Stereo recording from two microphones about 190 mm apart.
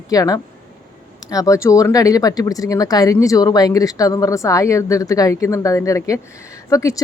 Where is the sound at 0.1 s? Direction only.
20° left (ahead or behind).